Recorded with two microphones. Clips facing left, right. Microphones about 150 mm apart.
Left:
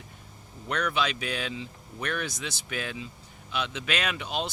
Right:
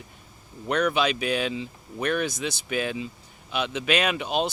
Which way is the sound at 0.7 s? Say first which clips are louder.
Right 5 dB; 15° right (ahead or behind).